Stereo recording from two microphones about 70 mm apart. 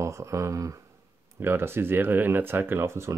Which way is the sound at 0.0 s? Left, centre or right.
Right.